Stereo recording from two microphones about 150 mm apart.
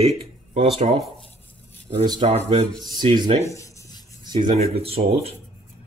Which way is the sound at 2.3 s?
45° right (ahead or behind).